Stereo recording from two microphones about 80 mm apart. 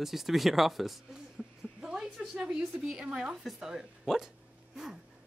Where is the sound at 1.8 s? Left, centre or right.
Centre.